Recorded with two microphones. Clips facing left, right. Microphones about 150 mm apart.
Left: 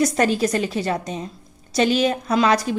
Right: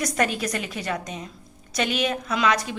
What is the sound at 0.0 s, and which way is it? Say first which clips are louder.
A woman's voice: left 6 dB; 30° left (ahead or behind).